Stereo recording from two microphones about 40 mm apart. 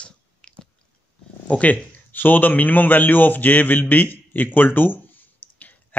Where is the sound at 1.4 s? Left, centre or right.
Left.